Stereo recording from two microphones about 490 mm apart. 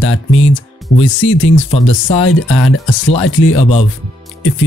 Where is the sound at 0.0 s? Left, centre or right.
Left.